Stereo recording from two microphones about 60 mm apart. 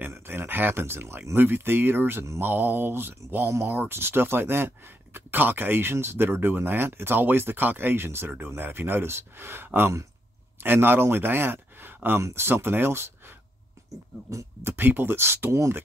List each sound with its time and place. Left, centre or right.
0.1 s a sound: right
1.3 s speech: right
12.2 s speech: right
14.6 s speech: right